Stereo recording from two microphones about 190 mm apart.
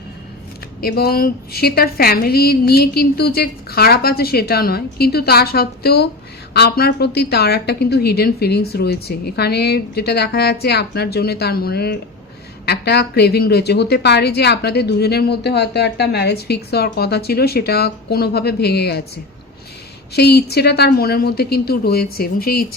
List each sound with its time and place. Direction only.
0.8 s a woman's voice: 55° left (ahead or behind)
20.1 s a woman's voice: 60° left (ahead or behind)